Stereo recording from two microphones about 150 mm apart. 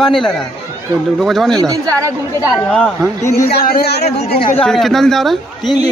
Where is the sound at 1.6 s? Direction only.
25° right (ahead or behind).